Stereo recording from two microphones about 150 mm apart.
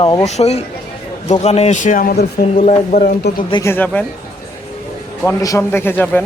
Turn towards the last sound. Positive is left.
turn(degrees=10)  # may be behind; listen again after turning